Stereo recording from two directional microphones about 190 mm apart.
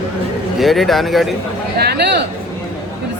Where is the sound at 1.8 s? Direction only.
60° right (ahead or behind).